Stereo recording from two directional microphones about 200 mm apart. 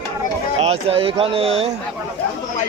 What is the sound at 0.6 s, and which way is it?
Speech, 30° right (ahead or behind).